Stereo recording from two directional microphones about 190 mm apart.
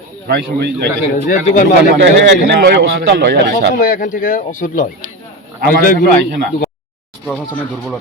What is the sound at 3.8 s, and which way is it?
Speech, 45° left (ahead or behind).